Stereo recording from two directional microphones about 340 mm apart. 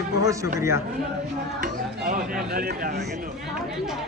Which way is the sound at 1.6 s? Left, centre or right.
Right.